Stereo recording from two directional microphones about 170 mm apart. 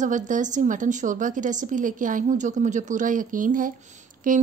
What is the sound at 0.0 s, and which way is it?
A woman's voice, 45° right (ahead or behind).